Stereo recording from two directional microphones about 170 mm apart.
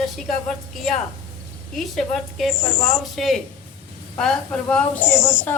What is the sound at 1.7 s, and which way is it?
A woman's voice, centre (ahead or behind).